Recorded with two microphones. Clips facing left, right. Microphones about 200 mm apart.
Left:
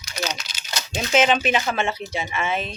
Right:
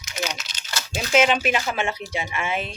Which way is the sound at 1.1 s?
5° right (ahead or behind).